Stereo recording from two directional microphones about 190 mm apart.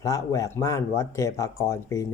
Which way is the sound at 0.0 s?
15° left (ahead or behind).